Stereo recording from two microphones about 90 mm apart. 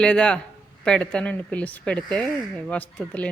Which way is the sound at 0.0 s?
10° left (ahead or behind).